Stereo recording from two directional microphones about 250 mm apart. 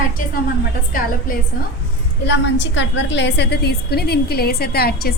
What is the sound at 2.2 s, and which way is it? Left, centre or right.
A woman's voice, left.